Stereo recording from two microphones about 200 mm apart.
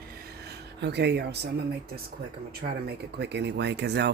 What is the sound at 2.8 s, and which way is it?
Speech, 60° right (ahead or behind).